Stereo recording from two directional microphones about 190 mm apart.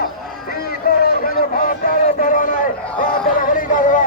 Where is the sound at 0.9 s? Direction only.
50° left (ahead or behind).